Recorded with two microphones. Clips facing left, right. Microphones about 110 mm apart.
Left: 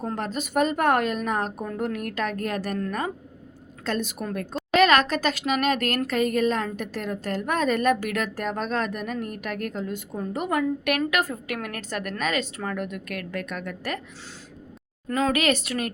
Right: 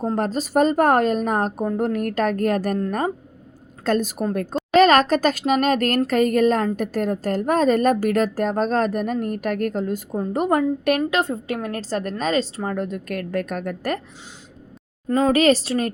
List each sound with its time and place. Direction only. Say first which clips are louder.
0.0 s speech: right 6 dB; 35° right (ahead or behind)
1.9 s a woman's voice: right 7 dB; 45° right (ahead or behind)
3.8 s speech: right 7 dB; 40° right (ahead or behind)
15.0 s speech: right 6 dB; 25° right (ahead or behind)